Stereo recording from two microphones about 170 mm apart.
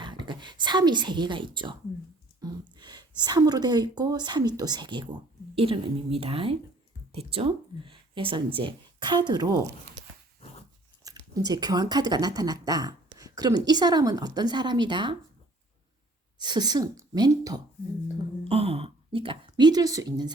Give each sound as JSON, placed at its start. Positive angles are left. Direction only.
{"t": 0.0, "sound": "a woman's voice", "side_deg": -25}
{"t": 11.0, "sound": "speech", "side_deg": -20}
{"t": 16.4, "sound": "speech", "side_deg": -25}
{"t": 18.4, "sound": "a sound", "side_deg": -35}